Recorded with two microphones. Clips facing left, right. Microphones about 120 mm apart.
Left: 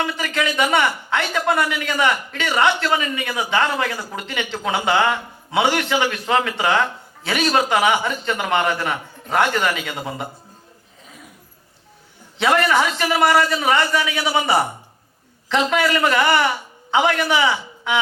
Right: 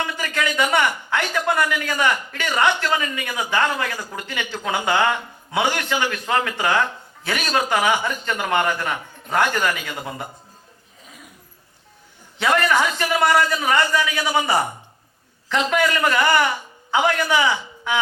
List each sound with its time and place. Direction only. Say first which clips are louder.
0.0 s a man's voice: left 2 dB; 20° left (ahead or behind)
12.4 s a man's voice: left 2 dB; 20° left (ahead or behind)